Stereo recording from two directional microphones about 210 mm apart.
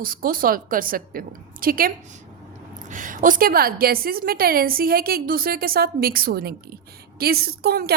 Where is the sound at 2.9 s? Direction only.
40° right (ahead or behind).